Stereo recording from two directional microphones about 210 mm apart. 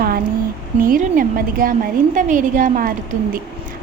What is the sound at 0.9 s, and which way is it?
Speech, 40° right (ahead or behind).